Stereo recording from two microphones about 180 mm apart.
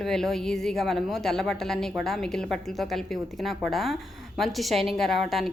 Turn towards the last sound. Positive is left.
turn(degrees=0)  # may be behind; listen again after turning